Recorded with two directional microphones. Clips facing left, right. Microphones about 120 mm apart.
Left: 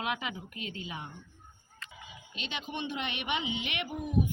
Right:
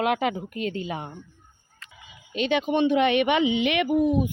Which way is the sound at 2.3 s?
60° right (ahead or behind).